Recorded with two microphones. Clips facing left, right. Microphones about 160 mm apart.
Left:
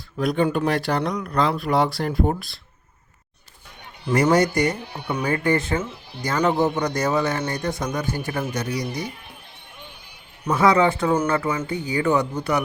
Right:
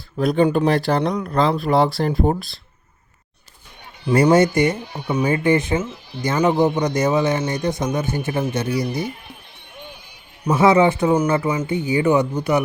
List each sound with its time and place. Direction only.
0.2 s speech: 30° right (ahead or behind)
4.1 s speech: 25° right (ahead or behind)
10.5 s speech: 25° right (ahead or behind)